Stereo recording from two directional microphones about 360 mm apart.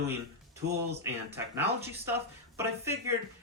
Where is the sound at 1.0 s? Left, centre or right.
Centre.